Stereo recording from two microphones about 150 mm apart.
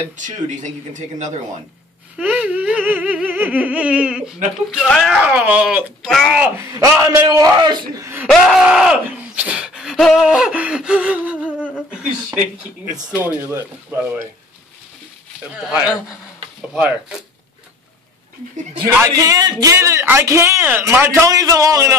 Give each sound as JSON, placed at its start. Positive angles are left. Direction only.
{"t": 0.2, "sound": "speech", "side_deg": -55}
{"t": 2.1, "sound": "a sound", "side_deg": -10}
{"t": 4.7, "sound": "speech", "side_deg": 5}
{"t": 6.6, "sound": "a man's voice", "side_deg": -20}
{"t": 8.3, "sound": "speech", "side_deg": 0}
{"t": 11.4, "sound": "humming", "side_deg": 10}
{"t": 11.9, "sound": "speech", "side_deg": -5}
{"t": 13.1, "sound": "a sound", "side_deg": -15}
{"t": 16.7, "sound": "a sound", "side_deg": -10}
{"t": 18.9, "sound": "a man's voice", "side_deg": -20}